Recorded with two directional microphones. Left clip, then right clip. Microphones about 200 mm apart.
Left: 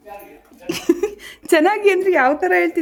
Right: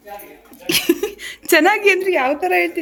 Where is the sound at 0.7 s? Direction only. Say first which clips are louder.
Right 2 dB; 5° left (ahead or behind); by 2.4 s 20° left (ahead or behind).